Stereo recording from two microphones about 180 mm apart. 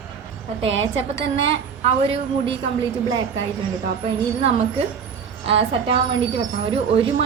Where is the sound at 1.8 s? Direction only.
35° right (ahead or behind).